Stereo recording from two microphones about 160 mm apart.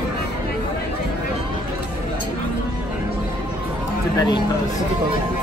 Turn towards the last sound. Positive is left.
turn(degrees=25)  # may be behind; listen again after turning